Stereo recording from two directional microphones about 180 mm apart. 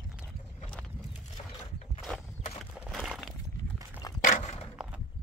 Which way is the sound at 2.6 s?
Centre (ahead or behind).